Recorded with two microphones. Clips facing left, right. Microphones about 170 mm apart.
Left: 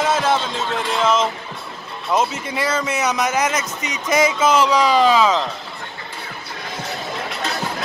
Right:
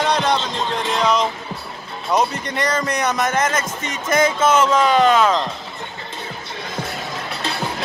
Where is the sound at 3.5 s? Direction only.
50° right (ahead or behind).